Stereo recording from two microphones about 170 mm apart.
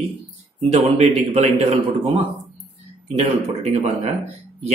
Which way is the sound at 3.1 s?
40° right (ahead or behind).